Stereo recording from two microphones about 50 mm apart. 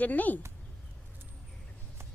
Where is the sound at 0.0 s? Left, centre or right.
Left.